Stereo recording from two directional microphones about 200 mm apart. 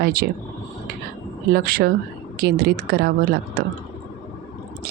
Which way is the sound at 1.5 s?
50° right (ahead or behind).